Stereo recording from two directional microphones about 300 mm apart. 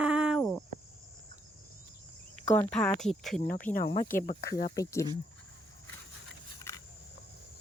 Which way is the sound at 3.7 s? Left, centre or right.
Left.